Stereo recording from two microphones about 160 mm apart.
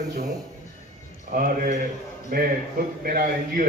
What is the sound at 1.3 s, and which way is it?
Speech, 65° right (ahead or behind).